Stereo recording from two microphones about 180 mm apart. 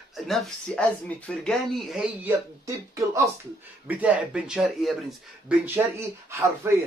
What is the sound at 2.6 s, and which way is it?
Speech, 15° right (ahead or behind).